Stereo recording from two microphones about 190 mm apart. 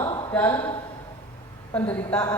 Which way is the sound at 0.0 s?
20° left (ahead or behind).